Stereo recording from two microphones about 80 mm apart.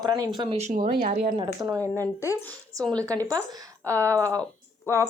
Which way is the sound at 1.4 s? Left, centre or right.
Right.